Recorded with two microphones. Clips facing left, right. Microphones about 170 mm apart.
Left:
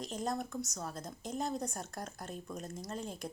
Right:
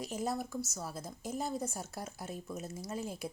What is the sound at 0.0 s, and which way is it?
Speech, 5° right (ahead or behind).